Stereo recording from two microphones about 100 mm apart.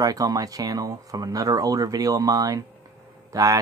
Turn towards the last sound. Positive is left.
turn(degrees=-35)  # may be behind; listen again after turning